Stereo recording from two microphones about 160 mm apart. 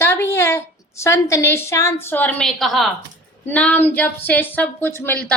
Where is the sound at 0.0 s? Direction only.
15° left (ahead or behind).